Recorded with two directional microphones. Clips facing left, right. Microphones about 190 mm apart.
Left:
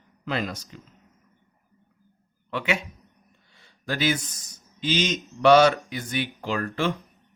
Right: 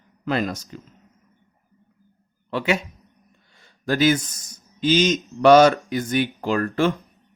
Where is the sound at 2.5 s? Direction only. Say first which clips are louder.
Right 5 dB; 40° right (ahead or behind).